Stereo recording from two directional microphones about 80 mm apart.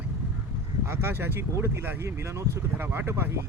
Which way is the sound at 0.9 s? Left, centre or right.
Right.